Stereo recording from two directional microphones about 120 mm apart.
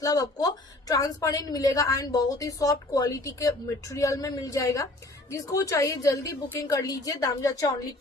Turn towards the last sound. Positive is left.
turn(degrees=30)  # may be behind; listen again after turning